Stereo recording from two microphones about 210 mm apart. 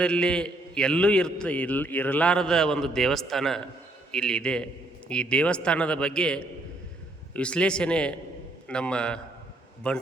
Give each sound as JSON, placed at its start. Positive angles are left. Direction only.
{"t": 0.0, "sound": "a man's voice", "side_deg": 5}